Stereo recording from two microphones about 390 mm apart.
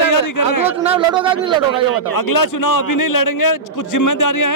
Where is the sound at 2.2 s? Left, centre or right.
Left.